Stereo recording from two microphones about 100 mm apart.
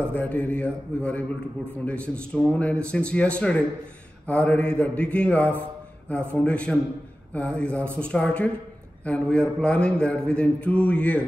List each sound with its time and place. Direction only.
0.1 s mantra: 15° left (ahead or behind)